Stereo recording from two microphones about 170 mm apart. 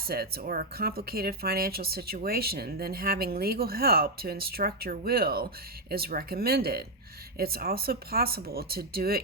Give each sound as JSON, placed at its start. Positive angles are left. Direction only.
{"t": 0.1, "sound": "speech", "side_deg": -65}